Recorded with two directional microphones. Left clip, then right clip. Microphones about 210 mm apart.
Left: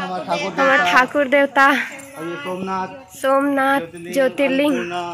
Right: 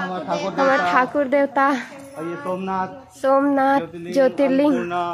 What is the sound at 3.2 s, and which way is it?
Speech, 10° right (ahead or behind).